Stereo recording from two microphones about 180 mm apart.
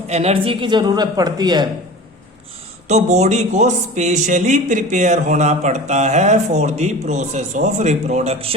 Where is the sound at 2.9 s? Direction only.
40° right (ahead or behind).